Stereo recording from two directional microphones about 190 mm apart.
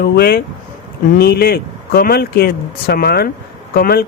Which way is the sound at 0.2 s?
55° left (ahead or behind).